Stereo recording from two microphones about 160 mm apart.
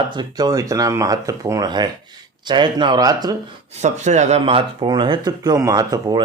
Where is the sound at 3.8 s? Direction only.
45° right (ahead or behind); by 6.2 s 25° right (ahead or behind).